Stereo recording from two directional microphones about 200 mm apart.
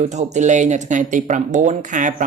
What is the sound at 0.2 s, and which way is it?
Speech, 35° right (ahead or behind).